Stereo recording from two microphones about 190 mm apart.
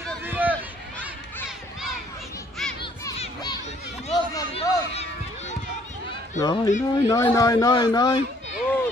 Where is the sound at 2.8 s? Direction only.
25° left (ahead or behind).